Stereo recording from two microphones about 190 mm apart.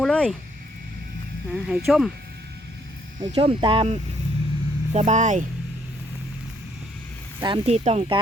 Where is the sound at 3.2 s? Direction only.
25° right (ahead or behind).